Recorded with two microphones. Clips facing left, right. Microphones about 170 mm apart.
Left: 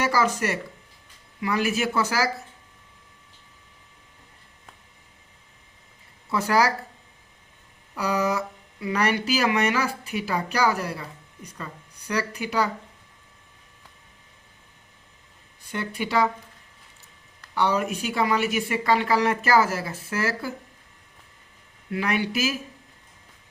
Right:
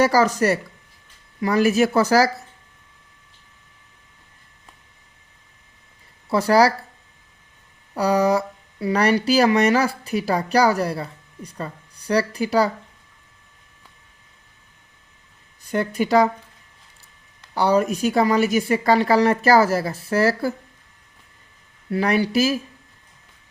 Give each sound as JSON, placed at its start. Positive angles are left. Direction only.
{"t": 0.0, "sound": "speech", "side_deg": -40}
{"t": 6.3, "sound": "speech", "side_deg": -35}
{"t": 7.9, "sound": "speech", "side_deg": -35}
{"t": 15.7, "sound": "speech", "side_deg": -40}
{"t": 17.5, "sound": "speech", "side_deg": -35}
{"t": 21.8, "sound": "speech", "side_deg": -35}